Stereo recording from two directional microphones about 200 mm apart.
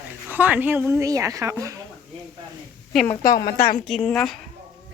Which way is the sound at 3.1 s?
20° left (ahead or behind).